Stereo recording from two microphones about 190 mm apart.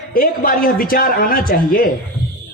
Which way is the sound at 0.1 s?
50° left (ahead or behind).